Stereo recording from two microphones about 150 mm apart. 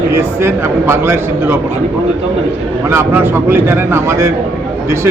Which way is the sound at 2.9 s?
15° right (ahead or behind).